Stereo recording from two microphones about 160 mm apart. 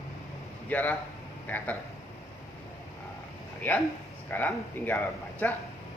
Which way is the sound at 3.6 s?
10° left (ahead or behind).